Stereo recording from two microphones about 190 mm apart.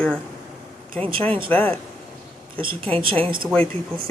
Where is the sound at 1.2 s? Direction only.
25° right (ahead or behind).